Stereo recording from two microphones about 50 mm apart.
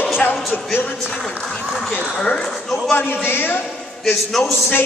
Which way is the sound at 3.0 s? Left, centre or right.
Left.